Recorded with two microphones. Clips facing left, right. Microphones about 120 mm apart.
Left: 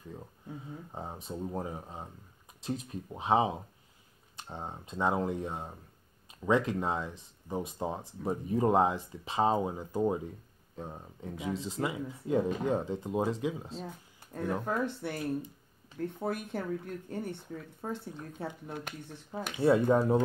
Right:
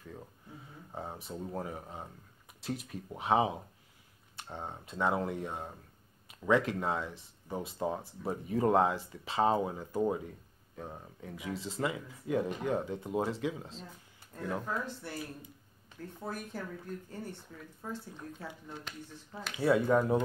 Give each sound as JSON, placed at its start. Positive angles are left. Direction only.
{"t": 0.9, "sound": "speech", "side_deg": 20}
{"t": 4.4, "sound": "speech", "side_deg": 15}
{"t": 13.8, "sound": "a sound", "side_deg": 60}
{"t": 14.7, "sound": "speech", "side_deg": 55}
{"t": 16.2, "sound": "speech", "side_deg": 60}
{"t": 17.8, "sound": "speech", "side_deg": 45}
{"t": 18.7, "sound": "speech", "side_deg": 55}
{"t": 19.6, "sound": "speech", "side_deg": 25}